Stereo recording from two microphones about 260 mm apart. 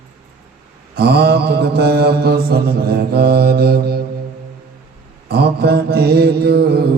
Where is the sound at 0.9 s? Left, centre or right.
Right.